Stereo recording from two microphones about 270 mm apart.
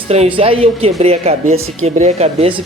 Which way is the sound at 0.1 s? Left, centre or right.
Right.